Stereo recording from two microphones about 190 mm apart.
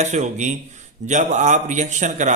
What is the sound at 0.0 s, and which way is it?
A man's voice, 40° right (ahead or behind).